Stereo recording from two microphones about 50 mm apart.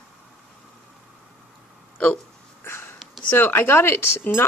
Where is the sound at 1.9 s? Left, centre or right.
Left.